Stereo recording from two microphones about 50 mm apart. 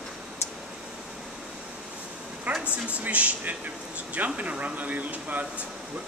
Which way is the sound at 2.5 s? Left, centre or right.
Right.